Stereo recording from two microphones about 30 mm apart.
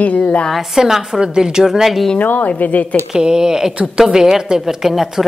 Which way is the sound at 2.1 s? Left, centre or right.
Left.